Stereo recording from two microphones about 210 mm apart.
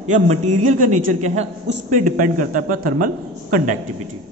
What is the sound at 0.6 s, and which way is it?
A man's voice, 35° right (ahead or behind).